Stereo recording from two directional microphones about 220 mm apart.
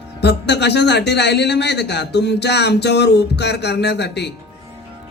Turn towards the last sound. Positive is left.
turn(degrees=50)  # may be behind; listen again after turning